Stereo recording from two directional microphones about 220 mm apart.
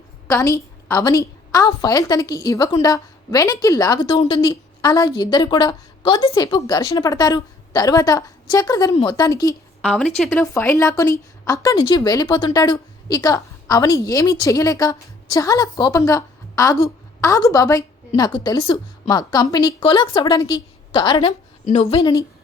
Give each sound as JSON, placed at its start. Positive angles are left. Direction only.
{"t": 0.3, "sound": "a woman's voice", "side_deg": 15}